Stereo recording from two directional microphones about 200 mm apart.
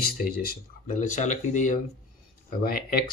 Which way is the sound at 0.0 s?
50° left (ahead or behind).